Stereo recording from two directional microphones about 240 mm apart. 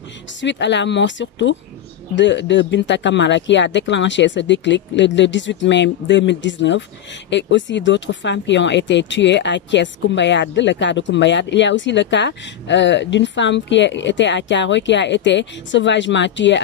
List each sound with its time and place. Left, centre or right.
0.4 s speech: left